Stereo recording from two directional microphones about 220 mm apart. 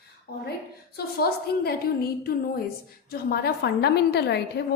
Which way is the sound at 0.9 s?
45° left (ahead or behind).